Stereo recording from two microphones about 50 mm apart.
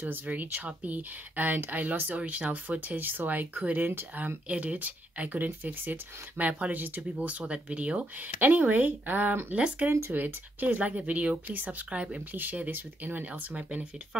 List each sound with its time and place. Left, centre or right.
0.1 s speech: right
8.4 s speech: right
9.5 s speech: right